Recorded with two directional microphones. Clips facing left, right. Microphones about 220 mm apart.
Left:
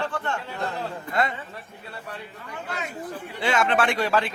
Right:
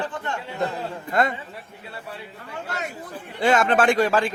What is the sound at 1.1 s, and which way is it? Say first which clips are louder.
Speech: right 4 dB; 45° right (ahead or behind).